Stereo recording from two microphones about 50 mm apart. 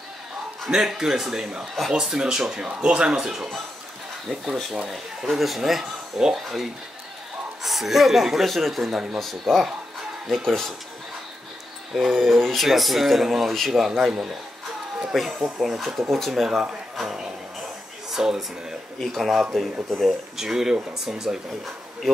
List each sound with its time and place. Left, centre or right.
0.7 s speech: centre
4.8 s speech: centre
11.9 s speech: centre
15.1 s speech: centre
16.4 s speech: centre
17.0 s a sound: centre
18.1 s speech: centre
19.1 s speech: centre